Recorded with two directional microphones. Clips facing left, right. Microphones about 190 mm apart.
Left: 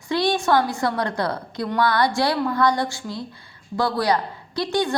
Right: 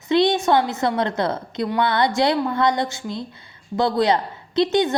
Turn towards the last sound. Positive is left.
turn(degrees=-20)  # may be behind; listen again after turning